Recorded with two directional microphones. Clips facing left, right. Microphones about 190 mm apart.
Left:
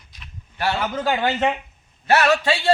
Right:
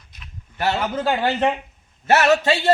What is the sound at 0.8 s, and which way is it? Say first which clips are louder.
Speech: right 1 dB; 10° right (ahead or behind).